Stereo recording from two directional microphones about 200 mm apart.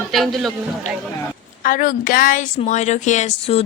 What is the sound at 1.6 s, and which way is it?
A woman's voice, 40° left (ahead or behind).